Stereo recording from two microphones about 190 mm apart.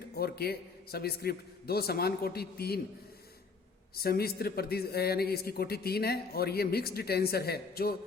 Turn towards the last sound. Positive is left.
turn(degrees=55)  # may be behind; listen again after turning